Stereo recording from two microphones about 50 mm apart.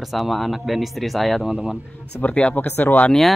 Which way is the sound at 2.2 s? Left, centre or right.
Left.